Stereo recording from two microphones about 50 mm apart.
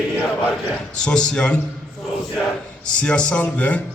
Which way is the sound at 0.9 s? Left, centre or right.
Centre.